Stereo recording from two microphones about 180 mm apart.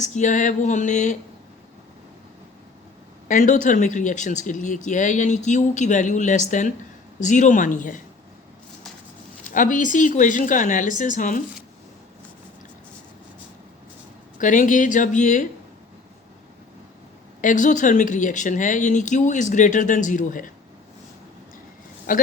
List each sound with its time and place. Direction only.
0.0 s speech: 40° left (ahead or behind)
3.2 s speech: 50° left (ahead or behind)
9.6 s speech: 45° left (ahead or behind)
14.3 s speech: 45° left (ahead or behind)
17.4 s speech: 45° left (ahead or behind)
22.1 s speech: 50° left (ahead or behind)